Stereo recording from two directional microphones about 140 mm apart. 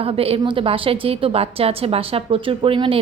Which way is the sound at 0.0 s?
45° right (ahead or behind).